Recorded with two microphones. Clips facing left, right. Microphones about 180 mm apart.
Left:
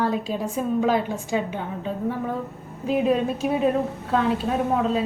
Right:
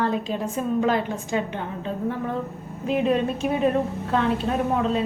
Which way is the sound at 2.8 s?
5° left (ahead or behind).